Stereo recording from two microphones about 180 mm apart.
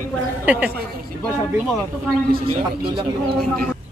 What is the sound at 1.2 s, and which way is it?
Speech, 5° left (ahead or behind).